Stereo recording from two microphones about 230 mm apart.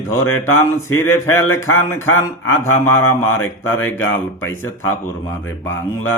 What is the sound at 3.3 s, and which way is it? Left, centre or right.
Speech, left.